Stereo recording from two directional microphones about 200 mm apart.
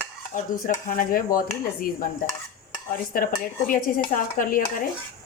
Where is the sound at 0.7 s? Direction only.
45° left (ahead or behind).